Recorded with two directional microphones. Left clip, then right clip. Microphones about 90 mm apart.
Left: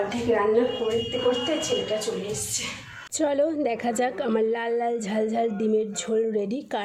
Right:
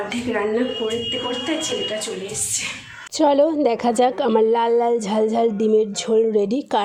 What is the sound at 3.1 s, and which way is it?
A woman's voice, 30° right (ahead or behind).